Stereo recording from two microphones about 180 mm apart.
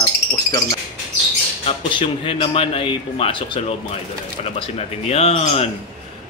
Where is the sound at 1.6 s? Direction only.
30° left (ahead or behind).